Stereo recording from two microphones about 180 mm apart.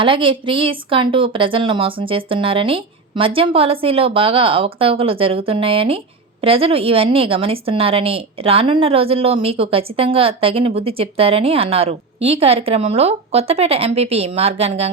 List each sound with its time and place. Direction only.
0.0 s a woman's voice: 30° right (ahead or behind)